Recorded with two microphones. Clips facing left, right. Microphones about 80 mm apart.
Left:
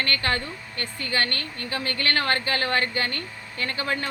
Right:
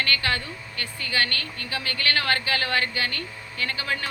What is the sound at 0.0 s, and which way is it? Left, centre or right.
A woman's voice, left.